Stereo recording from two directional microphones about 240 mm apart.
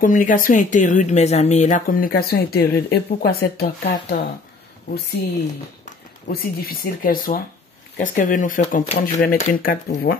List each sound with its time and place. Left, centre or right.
0.0 s speech: left
6.2 s speech: left